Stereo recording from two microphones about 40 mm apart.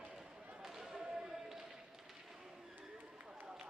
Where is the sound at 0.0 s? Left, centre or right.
Centre.